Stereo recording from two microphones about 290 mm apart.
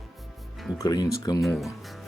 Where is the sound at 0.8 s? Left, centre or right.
Centre.